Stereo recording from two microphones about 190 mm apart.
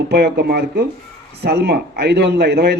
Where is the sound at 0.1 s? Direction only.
55° right (ahead or behind).